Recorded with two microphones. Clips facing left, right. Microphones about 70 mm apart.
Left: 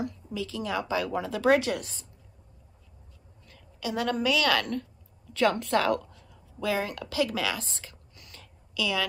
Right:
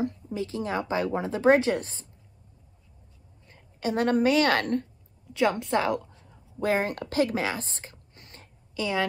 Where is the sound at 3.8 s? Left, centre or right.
Right.